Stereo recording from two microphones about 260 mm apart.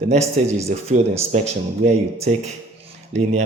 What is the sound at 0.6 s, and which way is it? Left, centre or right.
Speech, right.